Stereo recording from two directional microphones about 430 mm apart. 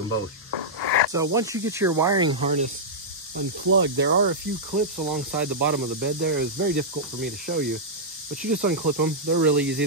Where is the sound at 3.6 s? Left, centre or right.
Right.